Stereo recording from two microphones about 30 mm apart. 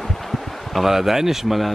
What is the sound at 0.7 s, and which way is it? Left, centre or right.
Speech, centre.